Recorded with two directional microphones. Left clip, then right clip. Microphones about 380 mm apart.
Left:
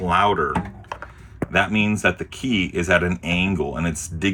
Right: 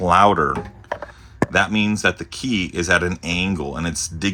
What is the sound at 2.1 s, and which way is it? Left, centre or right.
Speech, right.